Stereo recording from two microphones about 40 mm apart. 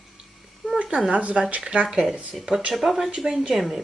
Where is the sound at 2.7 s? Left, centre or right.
Centre.